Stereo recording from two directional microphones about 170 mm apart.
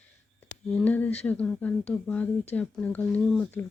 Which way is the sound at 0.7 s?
10° left (ahead or behind).